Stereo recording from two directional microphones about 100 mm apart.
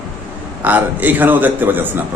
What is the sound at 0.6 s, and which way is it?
A man's voice, 15° right (ahead or behind).